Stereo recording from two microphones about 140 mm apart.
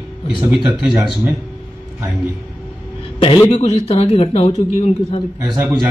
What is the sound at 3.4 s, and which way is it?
Speech, 50° left (ahead or behind).